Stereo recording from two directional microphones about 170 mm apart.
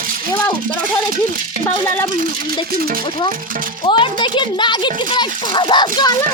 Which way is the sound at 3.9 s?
30° left (ahead or behind).